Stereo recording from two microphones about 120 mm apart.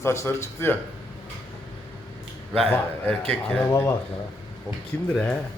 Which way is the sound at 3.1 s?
5° left (ahead or behind).